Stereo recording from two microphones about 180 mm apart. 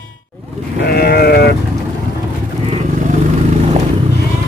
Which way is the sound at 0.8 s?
60° left (ahead or behind).